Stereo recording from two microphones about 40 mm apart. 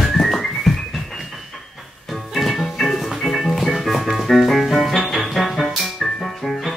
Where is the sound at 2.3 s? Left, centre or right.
Centre.